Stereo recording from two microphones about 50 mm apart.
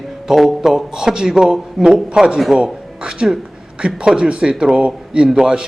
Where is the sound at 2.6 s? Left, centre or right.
Centre.